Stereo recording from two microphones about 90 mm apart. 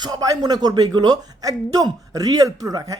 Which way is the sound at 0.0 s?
45° right (ahead or behind).